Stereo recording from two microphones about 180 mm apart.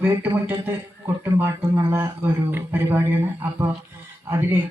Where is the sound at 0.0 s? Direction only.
10° right (ahead or behind).